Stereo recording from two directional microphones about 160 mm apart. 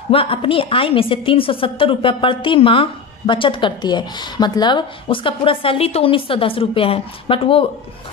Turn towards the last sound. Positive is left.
turn(degrees=35)  # may be behind; listen again after turning